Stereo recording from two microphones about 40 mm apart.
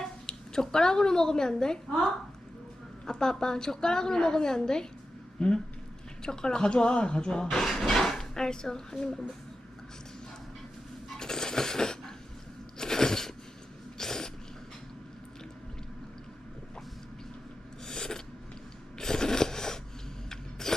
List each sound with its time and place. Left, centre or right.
0.0 s a woman's voice: centre
7.6 s dishes: centre
8.2 s a woman's voice: centre
11.2 s coin: centre
12.8 s crunch: centre
14.0 s sneeze: centre
17.8 s filing: centre
18.9 s a sound: centre